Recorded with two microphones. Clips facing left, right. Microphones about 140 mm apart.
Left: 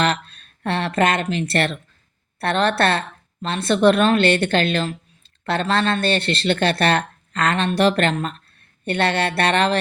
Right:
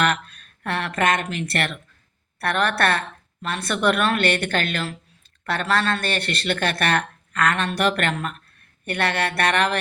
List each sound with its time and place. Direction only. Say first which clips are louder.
0.0 s speech: left 1 dB; 30° left (ahead or behind)